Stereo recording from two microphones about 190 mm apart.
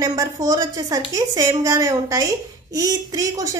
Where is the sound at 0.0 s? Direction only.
20° right (ahead or behind).